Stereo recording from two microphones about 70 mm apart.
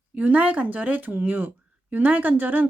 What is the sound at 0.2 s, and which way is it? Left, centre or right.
Speech, right.